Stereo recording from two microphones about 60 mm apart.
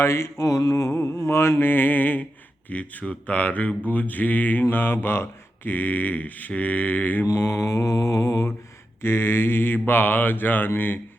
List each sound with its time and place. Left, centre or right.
0.0 s mantra: left
0.9 s music: left
2.6 s speech: left
4.7 s mantra: left
7.3 s mantra: left
9.0 s mantra: left